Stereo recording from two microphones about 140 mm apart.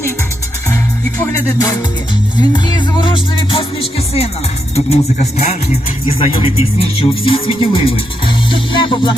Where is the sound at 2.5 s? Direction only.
30° left (ahead or behind); by 4.3 s 45° left (ahead or behind).